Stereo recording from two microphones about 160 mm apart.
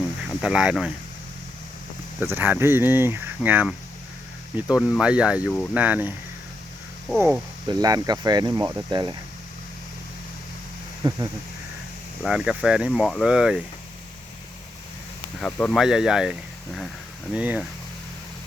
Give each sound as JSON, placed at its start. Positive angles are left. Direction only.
{"t": 0.4, "sound": "speech", "side_deg": -5}
{"t": 2.2, "sound": "speech", "side_deg": -15}
{"t": 7.2, "sound": "speech", "side_deg": -10}
{"t": 7.7, "sound": "speech", "side_deg": -25}
{"t": 11.0, "sound": "speech", "side_deg": -30}
{"t": 12.2, "sound": "speech", "side_deg": -5}
{"t": 15.4, "sound": "speech", "side_deg": 5}